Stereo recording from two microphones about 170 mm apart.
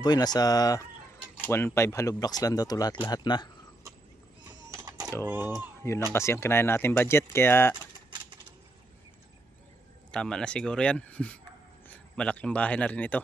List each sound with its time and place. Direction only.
0.0 s speech: 25° left (ahead or behind)
4.6 s a sound: 20° right (ahead or behind)
5.2 s speech: 10° right (ahead or behind)
5.8 s a sound: 15° left (ahead or behind)
6.1 s speech: 15° left (ahead or behind)
10.1 s speech: 5° left (ahead or behind)